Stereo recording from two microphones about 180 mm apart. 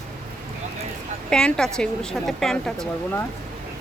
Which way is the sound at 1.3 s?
5° left (ahead or behind).